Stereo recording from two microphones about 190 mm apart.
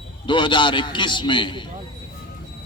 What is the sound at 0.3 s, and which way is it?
A man's voice, 25° left (ahead or behind).